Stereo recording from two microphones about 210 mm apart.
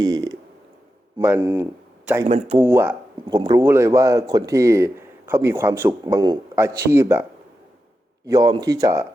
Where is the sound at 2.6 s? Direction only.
10° right (ahead or behind).